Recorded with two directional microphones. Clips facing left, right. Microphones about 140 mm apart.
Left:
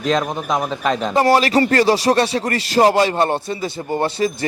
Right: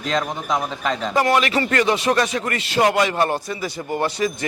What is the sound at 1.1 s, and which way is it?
Speech, 35° left (ahead or behind).